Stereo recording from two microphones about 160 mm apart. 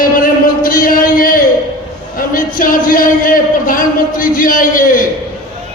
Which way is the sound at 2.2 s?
60° left (ahead or behind).